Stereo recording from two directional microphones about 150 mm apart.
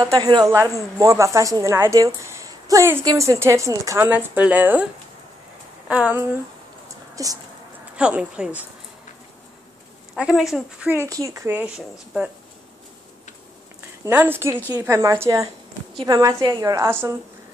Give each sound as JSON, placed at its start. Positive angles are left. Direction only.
{"t": 0.0, "sound": "a woman's voice", "side_deg": -25}
{"t": 4.1, "sound": "speech", "side_deg": -10}
{"t": 5.9, "sound": "speech", "side_deg": -10}
{"t": 7.2, "sound": "a woman's voice", "side_deg": -25}
{"t": 7.9, "sound": "speech", "side_deg": -5}
{"t": 10.1, "sound": "speech", "side_deg": -5}
{"t": 11.1, "sound": "speech", "side_deg": -20}
{"t": 14.0, "sound": "a woman's voice", "side_deg": -15}